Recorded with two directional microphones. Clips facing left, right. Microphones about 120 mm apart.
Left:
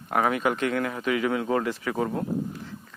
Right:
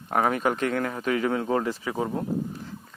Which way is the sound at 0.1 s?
30° right (ahead or behind).